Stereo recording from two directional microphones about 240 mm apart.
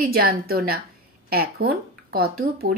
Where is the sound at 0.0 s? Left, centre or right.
Right.